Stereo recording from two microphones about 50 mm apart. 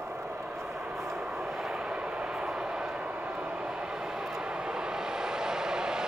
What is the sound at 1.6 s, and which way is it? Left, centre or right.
Vehicle, right.